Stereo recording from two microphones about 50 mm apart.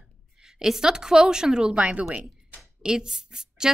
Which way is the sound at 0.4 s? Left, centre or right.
Centre.